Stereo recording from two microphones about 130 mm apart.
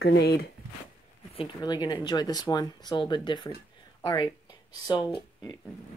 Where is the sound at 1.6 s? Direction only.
35° left (ahead or behind).